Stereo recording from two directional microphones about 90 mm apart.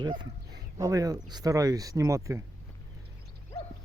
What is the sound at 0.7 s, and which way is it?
Speech, 40° right (ahead or behind).